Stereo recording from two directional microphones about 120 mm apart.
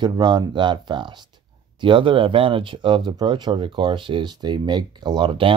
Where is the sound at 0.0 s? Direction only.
40° right (ahead or behind).